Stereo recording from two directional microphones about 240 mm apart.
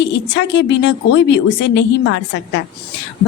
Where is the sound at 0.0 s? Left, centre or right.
Left.